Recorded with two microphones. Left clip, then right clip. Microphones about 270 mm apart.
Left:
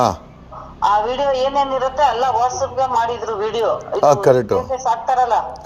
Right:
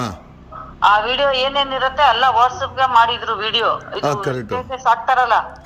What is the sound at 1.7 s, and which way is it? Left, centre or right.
A man's voice, right.